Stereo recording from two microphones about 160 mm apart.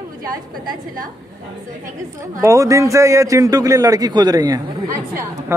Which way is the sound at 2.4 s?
20° right (ahead or behind).